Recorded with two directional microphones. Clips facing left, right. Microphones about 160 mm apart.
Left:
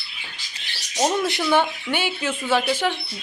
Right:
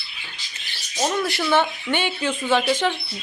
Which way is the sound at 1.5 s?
5° left (ahead or behind).